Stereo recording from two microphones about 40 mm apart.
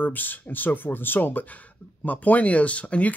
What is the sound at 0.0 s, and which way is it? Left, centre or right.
Speech, left.